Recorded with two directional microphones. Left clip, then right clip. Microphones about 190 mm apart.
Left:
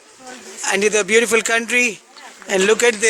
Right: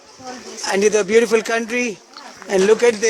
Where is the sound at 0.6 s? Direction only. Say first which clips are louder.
Right 1 dB; centre (ahead or behind).